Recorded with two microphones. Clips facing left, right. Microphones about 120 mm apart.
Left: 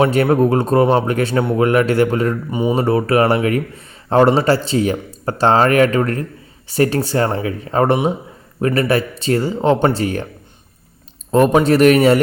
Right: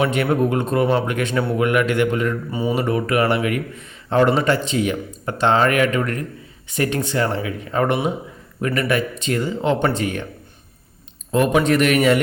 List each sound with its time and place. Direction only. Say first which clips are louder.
0.0 s a man's voice: left 5 dB; 40° left (ahead or behind)
2.5 s speech: left 4 dB; 20° left (ahead or behind)
2.7 s a man's voice: left 5 dB; 35° left (ahead or behind)
11.3 s a man's voice: left 4 dB; 40° left (ahead or behind)